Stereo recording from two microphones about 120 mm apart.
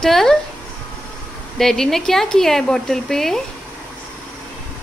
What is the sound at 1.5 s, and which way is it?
A woman's voice, 5° left (ahead or behind).